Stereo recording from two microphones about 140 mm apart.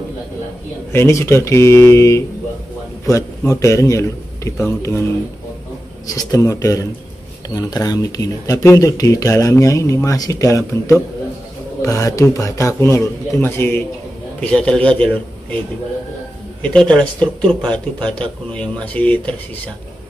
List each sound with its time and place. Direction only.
0.9 s speech: 20° left (ahead or behind)
6.1 s speech: 25° left (ahead or behind)
16.6 s speech: 5° left (ahead or behind)